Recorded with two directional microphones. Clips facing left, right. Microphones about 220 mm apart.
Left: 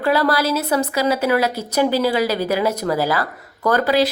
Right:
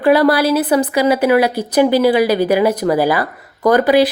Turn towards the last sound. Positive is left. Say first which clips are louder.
# right 6 dB
turn(degrees=-15)  # may be behind; listen again after turning